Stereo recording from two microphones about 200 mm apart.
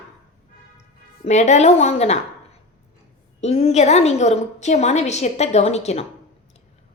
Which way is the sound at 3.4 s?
35° left (ahead or behind).